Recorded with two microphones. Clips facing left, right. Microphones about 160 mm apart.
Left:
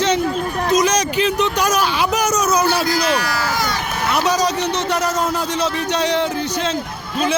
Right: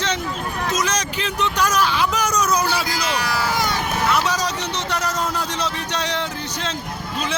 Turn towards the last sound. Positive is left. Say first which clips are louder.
# left 7 dB
turn(degrees=10)  # may be behind; listen again after turning